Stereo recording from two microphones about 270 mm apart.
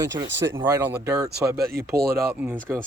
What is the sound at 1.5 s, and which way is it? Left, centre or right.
Speech, right.